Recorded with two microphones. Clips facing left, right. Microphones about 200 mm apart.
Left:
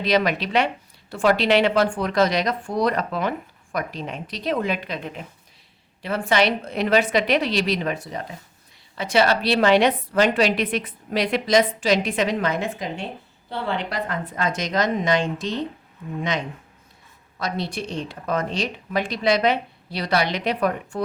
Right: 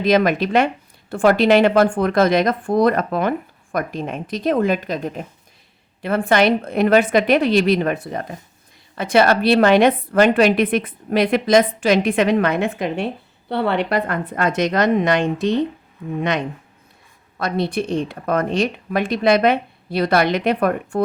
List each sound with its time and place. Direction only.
0.0 s speech: 50° right (ahead or behind)
6.0 s a woman's voice: 55° right (ahead or behind)
17.3 s a woman's voice: 55° right (ahead or behind)